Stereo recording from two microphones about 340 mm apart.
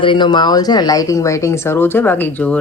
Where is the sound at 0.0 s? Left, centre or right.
Centre.